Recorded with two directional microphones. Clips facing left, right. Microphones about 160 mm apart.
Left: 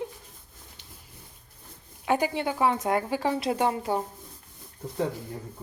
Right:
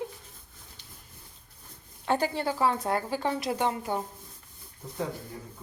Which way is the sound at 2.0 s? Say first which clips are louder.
Left 2 dB; 15° left (ahead or behind).